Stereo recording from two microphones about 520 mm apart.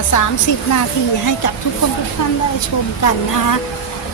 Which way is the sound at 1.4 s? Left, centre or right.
Left.